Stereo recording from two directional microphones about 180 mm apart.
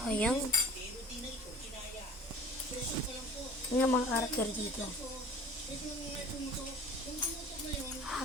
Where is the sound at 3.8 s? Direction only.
10° left (ahead or behind).